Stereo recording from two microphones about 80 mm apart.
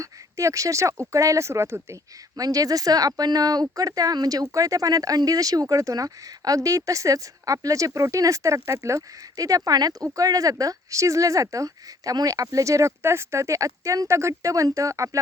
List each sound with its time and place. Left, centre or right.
0.0 s speech: right
2.3 s speech: right